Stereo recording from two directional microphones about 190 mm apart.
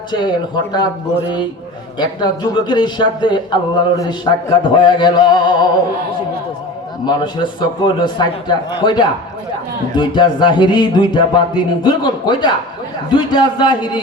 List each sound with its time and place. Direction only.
0.1 s a man's voice: 20° left (ahead or behind)
2.0 s a man's voice: 20° left (ahead or behind)
7.0 s a man's voice: 25° left (ahead or behind)